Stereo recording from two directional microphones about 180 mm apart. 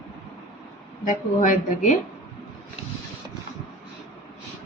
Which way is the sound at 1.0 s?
45° left (ahead or behind).